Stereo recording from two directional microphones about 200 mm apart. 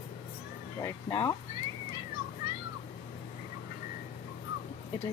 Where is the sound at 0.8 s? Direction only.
15° left (ahead or behind).